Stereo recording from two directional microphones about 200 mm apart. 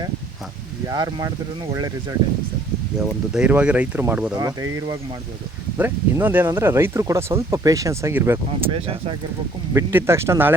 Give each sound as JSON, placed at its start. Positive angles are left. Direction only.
{"t": 0.9, "sound": "speech", "side_deg": -20}
{"t": 3.1, "sound": "speech", "side_deg": -5}
{"t": 8.7, "sound": "speech", "side_deg": -30}
{"t": 9.7, "sound": "speech", "side_deg": -15}